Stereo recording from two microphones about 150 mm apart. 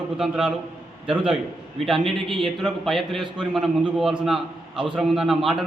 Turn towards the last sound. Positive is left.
turn(degrees=0)  # may be behind; listen again after turning